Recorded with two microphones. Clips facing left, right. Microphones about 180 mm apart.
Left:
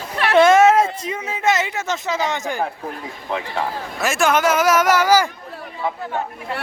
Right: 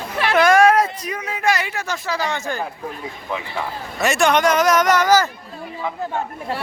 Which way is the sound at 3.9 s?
Centre (ahead or behind).